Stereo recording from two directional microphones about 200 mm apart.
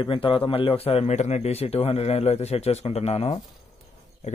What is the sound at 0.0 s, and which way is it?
A man's voice, 25° left (ahead or behind).